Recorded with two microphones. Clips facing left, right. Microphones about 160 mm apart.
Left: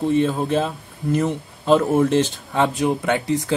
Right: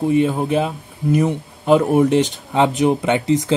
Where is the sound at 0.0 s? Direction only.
10° right (ahead or behind).